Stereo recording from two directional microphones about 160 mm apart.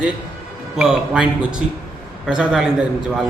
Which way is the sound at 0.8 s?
5° right (ahead or behind).